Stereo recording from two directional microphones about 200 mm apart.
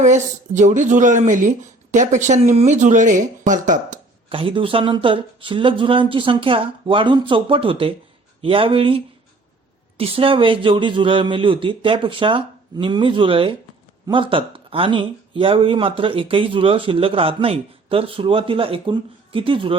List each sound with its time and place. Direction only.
0.0 s speech: 35° right (ahead or behind)
4.3 s speech: 25° right (ahead or behind)
10.0 s speech: 25° right (ahead or behind)